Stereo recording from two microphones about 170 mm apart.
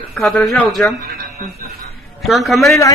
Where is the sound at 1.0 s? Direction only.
65° right (ahead or behind).